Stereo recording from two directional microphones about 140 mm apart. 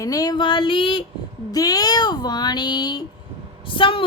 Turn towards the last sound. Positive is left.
turn(degrees=40)  # may be behind; listen again after turning